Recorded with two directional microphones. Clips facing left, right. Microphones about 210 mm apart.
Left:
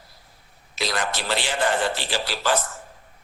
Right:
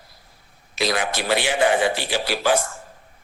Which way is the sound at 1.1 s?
60° right (ahead or behind).